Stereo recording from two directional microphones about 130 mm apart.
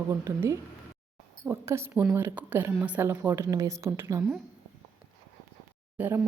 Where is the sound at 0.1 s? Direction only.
20° right (ahead or behind).